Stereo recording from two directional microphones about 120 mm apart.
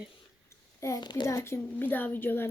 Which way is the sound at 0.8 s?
30° left (ahead or behind).